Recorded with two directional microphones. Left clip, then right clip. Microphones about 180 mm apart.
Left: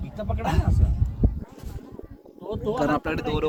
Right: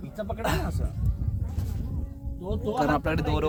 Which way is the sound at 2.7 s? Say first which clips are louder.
Left 1 dB; 10° right (ahead or behind).